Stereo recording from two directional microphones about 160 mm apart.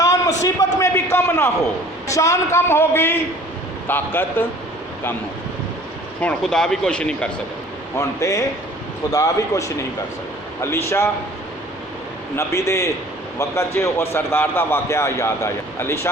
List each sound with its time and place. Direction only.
0.0 s a sound: 20° left (ahead or behind)
2.0 s a man's voice: 20° left (ahead or behind)
6.2 s speech: 5° left (ahead or behind)
7.9 s a man's voice: 20° left (ahead or behind)
12.4 s a man's voice: 20° left (ahead or behind)